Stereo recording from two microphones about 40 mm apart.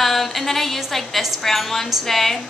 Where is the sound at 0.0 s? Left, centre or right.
Centre.